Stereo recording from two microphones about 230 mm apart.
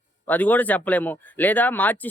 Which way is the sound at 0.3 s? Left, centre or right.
Centre.